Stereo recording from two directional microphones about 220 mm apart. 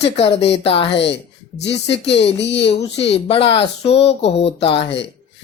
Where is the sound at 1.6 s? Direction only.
50° left (ahead or behind).